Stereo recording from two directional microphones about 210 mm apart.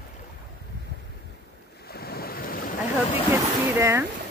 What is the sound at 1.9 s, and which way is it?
Waves, 45° left (ahead or behind).